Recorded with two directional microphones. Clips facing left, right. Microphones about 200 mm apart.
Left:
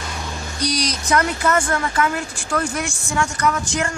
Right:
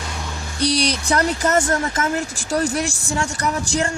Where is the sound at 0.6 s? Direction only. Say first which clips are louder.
Right 4 dB; 30° right (ahead or behind).